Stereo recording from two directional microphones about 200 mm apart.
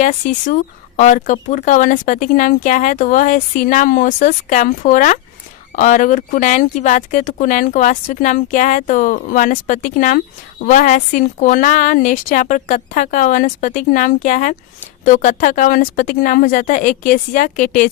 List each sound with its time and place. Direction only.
0.0 s speech: 40° left (ahead or behind)